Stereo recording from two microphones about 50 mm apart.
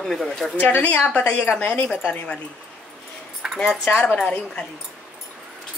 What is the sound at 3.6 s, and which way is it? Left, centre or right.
Speech, centre.